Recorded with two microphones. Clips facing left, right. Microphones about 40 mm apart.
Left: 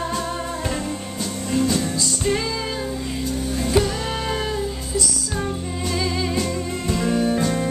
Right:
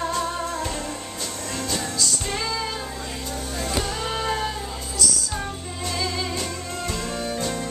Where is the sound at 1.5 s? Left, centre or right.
Centre.